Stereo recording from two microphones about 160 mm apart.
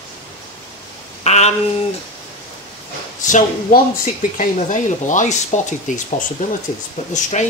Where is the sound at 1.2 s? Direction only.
45° left (ahead or behind).